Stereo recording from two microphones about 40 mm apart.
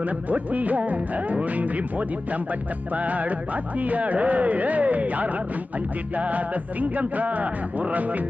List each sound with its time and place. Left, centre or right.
0.3 s speech: right